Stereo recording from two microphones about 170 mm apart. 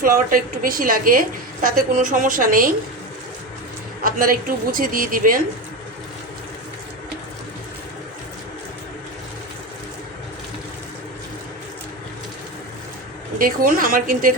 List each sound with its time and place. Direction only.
0.0 s a woman's voice: 55° right (ahead or behind)
4.0 s a woman's voice: 55° right (ahead or behind)
13.4 s a woman's voice: 55° right (ahead or behind)